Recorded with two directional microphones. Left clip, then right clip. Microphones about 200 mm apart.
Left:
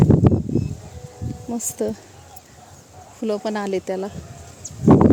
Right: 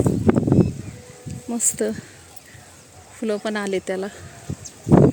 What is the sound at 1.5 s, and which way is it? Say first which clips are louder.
Speech: right 2 dB; 5° right (ahead or behind).